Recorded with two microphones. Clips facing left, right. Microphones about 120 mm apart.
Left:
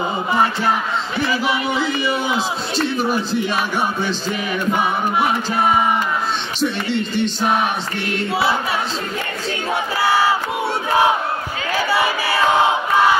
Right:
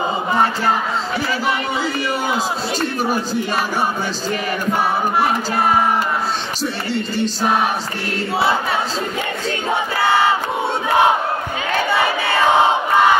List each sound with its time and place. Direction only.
3.1 s speech: 40° right (ahead or behind)
6.6 s speech: 40° right (ahead or behind)